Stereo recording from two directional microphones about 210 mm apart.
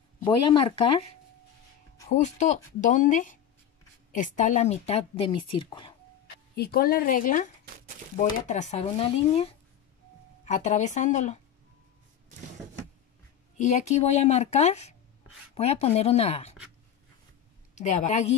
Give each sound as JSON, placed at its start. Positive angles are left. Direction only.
{"t": 0.2, "sound": "speech", "side_deg": 25}
{"t": 2.0, "sound": "a woman's voice", "side_deg": 35}
{"t": 6.5, "sound": "a woman's voice", "side_deg": 45}
{"t": 13.6, "sound": "a woman's voice", "side_deg": 35}
{"t": 17.7, "sound": "a woman's voice", "side_deg": 35}